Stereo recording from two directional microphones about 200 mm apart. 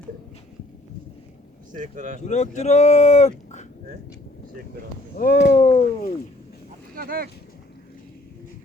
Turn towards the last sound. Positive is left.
turn(degrees=-50)  # may be behind; listen again after turning